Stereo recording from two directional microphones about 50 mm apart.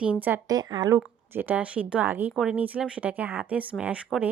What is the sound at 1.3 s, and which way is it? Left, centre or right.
Speech, right.